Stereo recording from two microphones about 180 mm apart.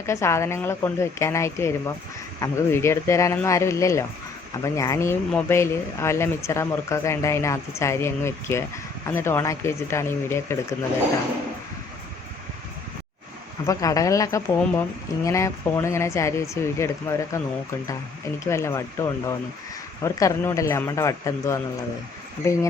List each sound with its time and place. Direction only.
0.0 s speech: 15° left (ahead or behind)
13.7 s speech: 20° left (ahead or behind)
18.4 s speech: 15° left (ahead or behind)